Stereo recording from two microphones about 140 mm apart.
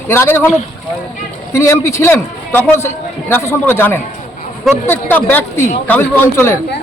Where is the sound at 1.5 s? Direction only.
20° left (ahead or behind).